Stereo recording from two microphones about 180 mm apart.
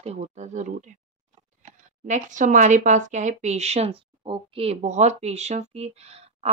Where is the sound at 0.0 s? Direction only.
35° right (ahead or behind).